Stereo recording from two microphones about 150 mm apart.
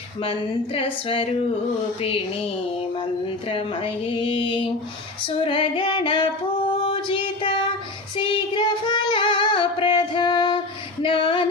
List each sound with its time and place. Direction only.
0.2 s speech: 40° left (ahead or behind)
3.5 s speech: 35° left (ahead or behind)
6.8 s a sound: 35° left (ahead or behind)
8.1 s female singing: 35° left (ahead or behind)
11.0 s music: 35° left (ahead or behind)